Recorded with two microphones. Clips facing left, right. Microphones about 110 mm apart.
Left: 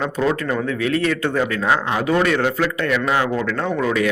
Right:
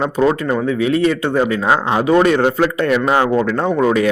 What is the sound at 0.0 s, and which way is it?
Speech, 25° right (ahead or behind).